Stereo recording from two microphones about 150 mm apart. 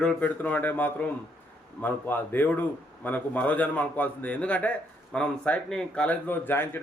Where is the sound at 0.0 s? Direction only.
10° left (ahead or behind).